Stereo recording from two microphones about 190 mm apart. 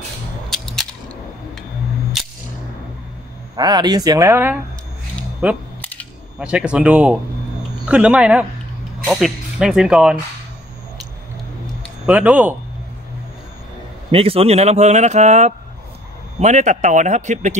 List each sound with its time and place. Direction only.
0.5 s camera: centre (ahead or behind)
2.2 s a sound: centre (ahead or behind)
3.5 s speech: 20° right (ahead or behind)
5.8 s camera: 10° left (ahead or behind)
6.4 s speech: 5° right (ahead or behind)
11.8 s speech: 5° right (ahead or behind)
14.1 s a man's voice: 30° right (ahead or behind)